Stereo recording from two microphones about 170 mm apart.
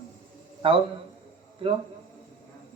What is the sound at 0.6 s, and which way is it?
Speech, 30° right (ahead or behind).